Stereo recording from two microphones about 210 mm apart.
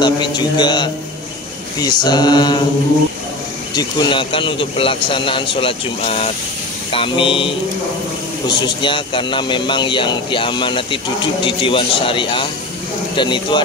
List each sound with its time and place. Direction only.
0.4 s a man's voice: 20° left (ahead or behind)
3.7 s a man's voice: 20° left (ahead or behind)